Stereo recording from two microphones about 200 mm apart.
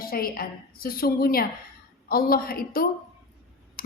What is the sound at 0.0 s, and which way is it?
A woman's voice, 50° left (ahead or behind).